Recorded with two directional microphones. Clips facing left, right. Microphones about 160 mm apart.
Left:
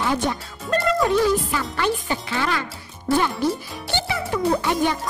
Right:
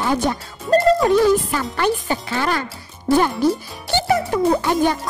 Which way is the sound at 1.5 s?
45° right (ahead or behind).